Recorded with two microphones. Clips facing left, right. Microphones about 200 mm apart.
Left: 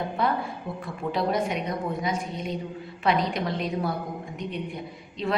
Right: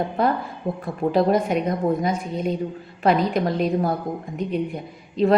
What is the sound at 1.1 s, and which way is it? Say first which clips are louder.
A woman's voice: right 7 dB; 45° right (ahead or behind).